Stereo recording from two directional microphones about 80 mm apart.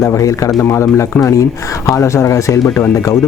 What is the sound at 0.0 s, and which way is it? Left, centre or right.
Speech, left.